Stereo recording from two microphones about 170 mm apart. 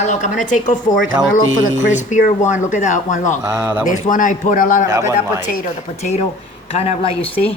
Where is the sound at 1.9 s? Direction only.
45° left (ahead or behind).